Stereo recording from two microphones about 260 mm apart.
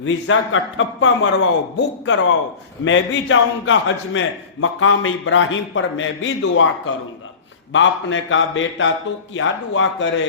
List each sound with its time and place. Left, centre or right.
0.0 s a man's voice: left